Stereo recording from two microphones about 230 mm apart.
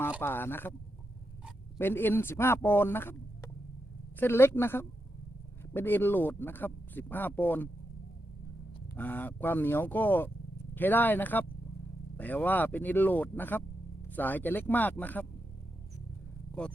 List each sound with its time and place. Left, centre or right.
0.2 s speech: centre
1.8 s speech: centre
9.0 s speech: centre